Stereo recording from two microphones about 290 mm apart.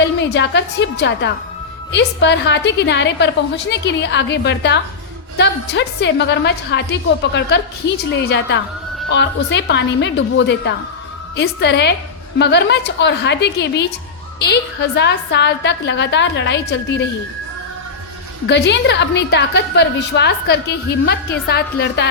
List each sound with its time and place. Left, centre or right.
0.0 s a woman's voice: left
18.4 s a woman's voice: left